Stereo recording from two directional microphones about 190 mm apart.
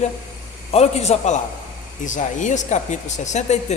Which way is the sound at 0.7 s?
35° left (ahead or behind).